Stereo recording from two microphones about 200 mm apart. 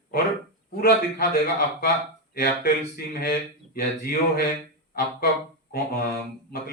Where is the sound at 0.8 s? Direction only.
45° left (ahead or behind).